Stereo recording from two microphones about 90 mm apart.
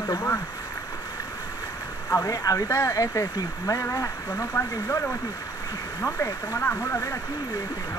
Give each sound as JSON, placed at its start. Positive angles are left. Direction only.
{"t": 2.0, "sound": "speech", "side_deg": 35}
{"t": 6.0, "sound": "speech", "side_deg": 35}